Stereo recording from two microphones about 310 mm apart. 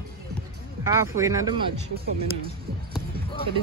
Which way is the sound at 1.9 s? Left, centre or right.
Right.